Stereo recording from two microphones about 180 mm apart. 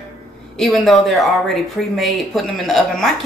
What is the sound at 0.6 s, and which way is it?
Speech, centre (ahead or behind).